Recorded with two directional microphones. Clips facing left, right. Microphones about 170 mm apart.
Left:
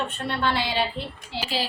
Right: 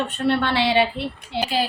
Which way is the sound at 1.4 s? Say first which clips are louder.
Right 5 dB; 50° right (ahead or behind).